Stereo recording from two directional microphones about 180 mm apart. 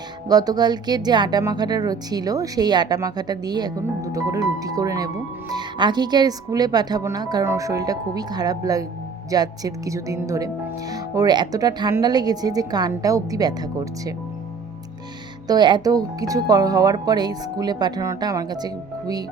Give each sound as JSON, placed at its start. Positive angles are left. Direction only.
{"t": 0.3, "sound": "speech", "side_deg": -20}
{"t": 15.4, "sound": "speech", "side_deg": -25}